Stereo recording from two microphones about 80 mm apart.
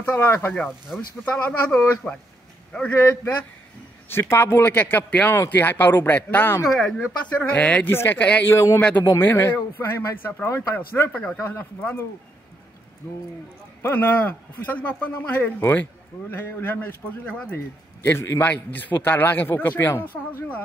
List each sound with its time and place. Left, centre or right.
0.0 s a man's voice: centre
6.6 s speech: centre
7.9 s a man's voice: left
8.2 s a man's voice: centre
8.5 s a man's voice: left
11.1 s speech: centre
11.4 s a man's voice: left
13.8 s a man's voice: left
17.3 s speech: centre
18.0 s a man's voice: left